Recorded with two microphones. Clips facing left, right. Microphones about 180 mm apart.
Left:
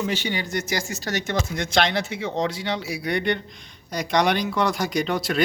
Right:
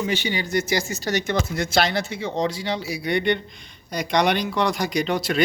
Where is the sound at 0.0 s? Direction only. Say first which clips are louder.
Right 1 dB; 10° right (ahead or behind).